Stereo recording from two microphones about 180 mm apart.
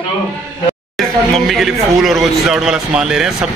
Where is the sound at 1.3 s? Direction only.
Centre (ahead or behind).